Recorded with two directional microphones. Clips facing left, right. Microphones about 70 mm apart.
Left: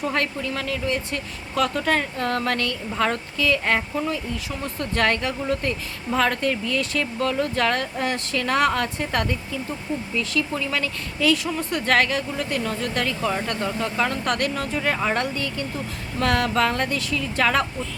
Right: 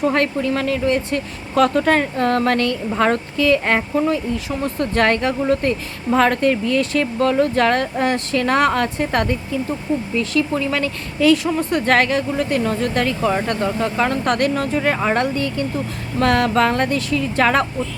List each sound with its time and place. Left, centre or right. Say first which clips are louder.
0.0 s speech: right 7 dB; right